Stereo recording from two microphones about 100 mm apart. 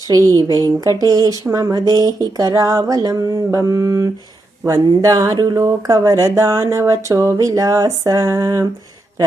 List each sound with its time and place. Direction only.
0.5 s speech: 40° right (ahead or behind)